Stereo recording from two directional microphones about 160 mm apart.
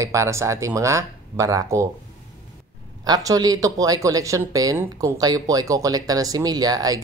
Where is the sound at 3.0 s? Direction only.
25° right (ahead or behind).